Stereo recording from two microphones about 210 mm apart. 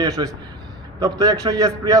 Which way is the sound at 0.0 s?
20° right (ahead or behind).